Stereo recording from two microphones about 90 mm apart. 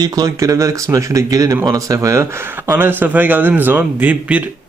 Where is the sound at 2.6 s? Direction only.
20° right (ahead or behind).